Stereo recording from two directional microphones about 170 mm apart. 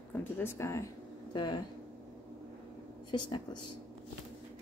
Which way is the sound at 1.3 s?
25° left (ahead or behind).